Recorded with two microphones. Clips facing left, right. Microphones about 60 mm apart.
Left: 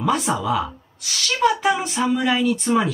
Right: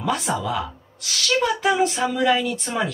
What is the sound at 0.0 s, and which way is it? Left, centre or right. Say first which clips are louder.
Speech: left 3 dB; centre.